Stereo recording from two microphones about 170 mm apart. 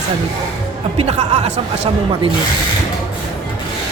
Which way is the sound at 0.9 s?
40° right (ahead or behind).